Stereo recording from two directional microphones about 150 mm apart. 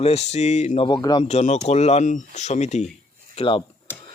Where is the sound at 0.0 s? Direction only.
45° left (ahead or behind).